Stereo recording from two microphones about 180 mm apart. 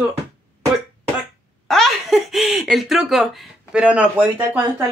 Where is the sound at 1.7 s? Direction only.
Centre (ahead or behind).